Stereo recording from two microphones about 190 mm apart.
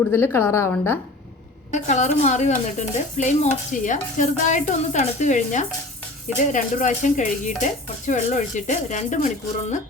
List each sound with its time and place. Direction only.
0.1 s a woman's voice: 10° left (ahead or behind)
1.7 s speech: 40° left (ahead or behind)